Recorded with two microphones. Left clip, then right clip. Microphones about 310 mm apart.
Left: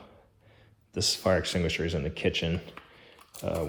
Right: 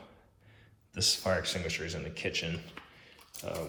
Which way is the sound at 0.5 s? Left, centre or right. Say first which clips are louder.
Left 8 dB; left.